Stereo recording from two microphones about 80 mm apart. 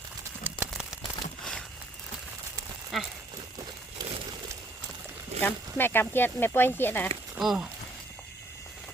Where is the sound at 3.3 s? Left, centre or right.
Right.